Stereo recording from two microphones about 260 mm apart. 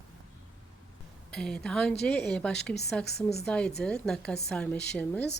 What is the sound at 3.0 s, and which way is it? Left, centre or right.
Speech, left.